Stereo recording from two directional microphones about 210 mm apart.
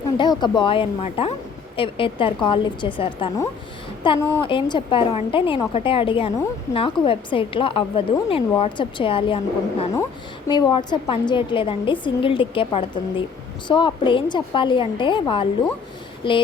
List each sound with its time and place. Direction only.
0.2 s a woman's voice: 20° left (ahead or behind)
10.5 s a woman's voice: 20° left (ahead or behind)